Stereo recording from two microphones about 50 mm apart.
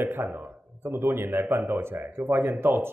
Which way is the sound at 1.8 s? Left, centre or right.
Right.